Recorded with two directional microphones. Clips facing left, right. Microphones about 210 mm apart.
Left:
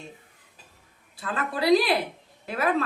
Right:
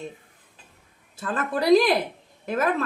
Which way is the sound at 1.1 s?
45° right (ahead or behind).